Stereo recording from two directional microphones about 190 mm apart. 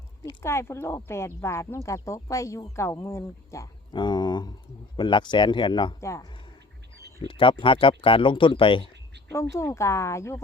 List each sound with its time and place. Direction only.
0.4 s a man's voice: 15° left (ahead or behind)
7.2 s a man's voice: 25° left (ahead or behind)
9.3 s speech: 15° left (ahead or behind)